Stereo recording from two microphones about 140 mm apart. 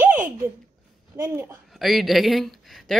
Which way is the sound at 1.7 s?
Centre (ahead or behind).